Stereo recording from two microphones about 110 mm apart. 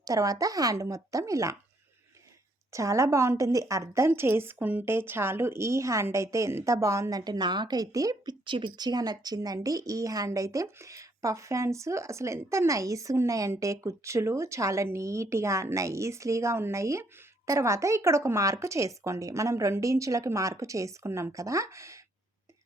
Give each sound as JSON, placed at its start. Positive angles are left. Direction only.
{"t": 0.0, "sound": "a woman's voice", "side_deg": -30}
{"t": 2.7, "sound": "a woman's voice", "side_deg": -30}